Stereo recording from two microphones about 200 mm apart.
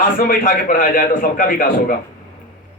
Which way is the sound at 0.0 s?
45° left (ahead or behind).